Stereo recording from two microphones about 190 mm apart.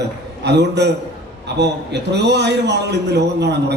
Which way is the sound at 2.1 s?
65° right (ahead or behind).